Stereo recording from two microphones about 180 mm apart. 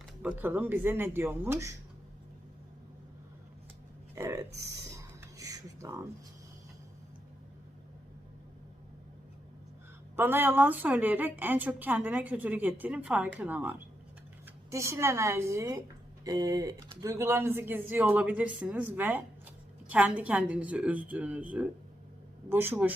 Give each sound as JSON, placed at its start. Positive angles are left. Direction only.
{"t": 0.2, "sound": "a woman's voice", "side_deg": -10}
{"t": 4.1, "sound": "a sound", "side_deg": -15}
{"t": 10.2, "sound": "a woman's voice", "side_deg": -10}